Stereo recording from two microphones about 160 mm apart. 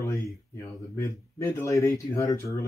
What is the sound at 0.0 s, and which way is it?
Speech, 15° left (ahead or behind).